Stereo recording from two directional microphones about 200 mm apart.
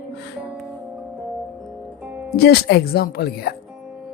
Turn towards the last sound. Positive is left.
turn(degrees=55)  # may be behind; listen again after turning